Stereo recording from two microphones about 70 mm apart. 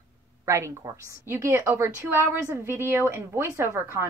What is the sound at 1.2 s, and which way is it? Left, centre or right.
A woman's voice, right.